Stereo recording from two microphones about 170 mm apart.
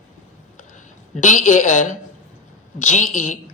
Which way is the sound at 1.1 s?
45° left (ahead or behind).